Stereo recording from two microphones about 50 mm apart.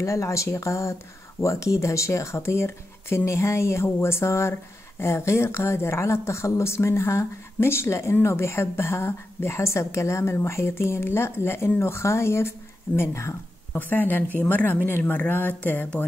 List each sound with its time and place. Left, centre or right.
0.0 s speech: left
3.8 s speech: left
11.8 s speech: left
13.7 s speech: left